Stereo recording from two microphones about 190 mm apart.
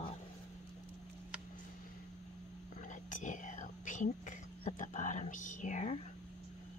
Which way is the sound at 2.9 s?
40° left (ahead or behind).